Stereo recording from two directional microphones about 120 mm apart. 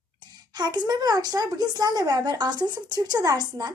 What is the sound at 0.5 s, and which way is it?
Speech, 35° right (ahead or behind).